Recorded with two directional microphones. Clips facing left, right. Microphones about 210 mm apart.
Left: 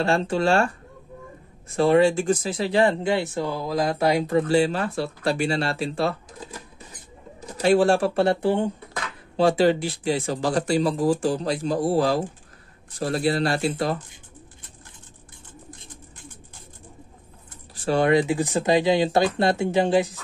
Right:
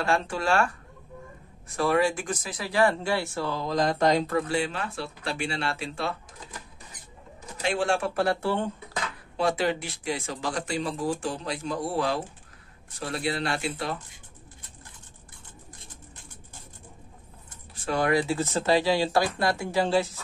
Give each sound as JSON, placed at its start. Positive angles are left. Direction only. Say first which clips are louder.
{"t": 0.0, "sound": "speech", "louder": "left 5 dB", "side_deg": 25}
{"t": 1.8, "sound": "speech", "louder": "left 6 dB", "side_deg": 25}
{"t": 4.3, "sound": "speech", "louder": "left 7 dB", "side_deg": 30}
{"t": 7.6, "sound": "speech", "louder": "left 8 dB", "side_deg": 35}
{"t": 9.4, "sound": "speech", "louder": "left 7 dB", "side_deg": 30}
{"t": 17.8, "sound": "speech", "louder": "left 5 dB", "side_deg": 25}